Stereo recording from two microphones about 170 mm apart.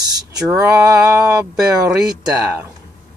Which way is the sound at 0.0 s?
25° right (ahead or behind).